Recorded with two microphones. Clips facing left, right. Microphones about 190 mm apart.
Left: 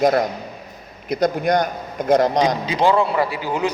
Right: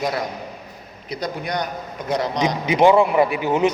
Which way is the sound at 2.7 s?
15° right (ahead or behind).